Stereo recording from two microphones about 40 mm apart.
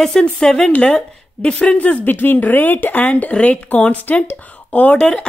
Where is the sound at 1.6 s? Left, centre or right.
Left.